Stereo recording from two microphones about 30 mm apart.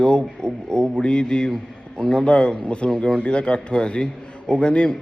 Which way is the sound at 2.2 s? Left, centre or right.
Left.